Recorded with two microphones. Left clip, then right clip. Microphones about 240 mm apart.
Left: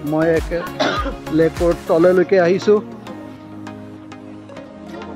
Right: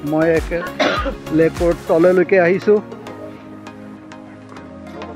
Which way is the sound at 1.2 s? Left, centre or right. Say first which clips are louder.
Even; centre.